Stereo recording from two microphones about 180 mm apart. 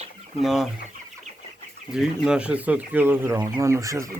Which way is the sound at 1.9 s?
5° right (ahead or behind).